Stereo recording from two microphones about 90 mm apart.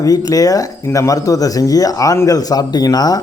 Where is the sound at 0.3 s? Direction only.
40° left (ahead or behind).